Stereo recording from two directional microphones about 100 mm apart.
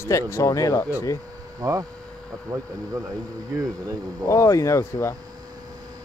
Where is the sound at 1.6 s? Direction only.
35° right (ahead or behind).